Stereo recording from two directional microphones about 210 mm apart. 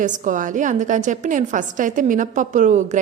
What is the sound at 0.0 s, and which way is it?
A woman's voice, 35° right (ahead or behind).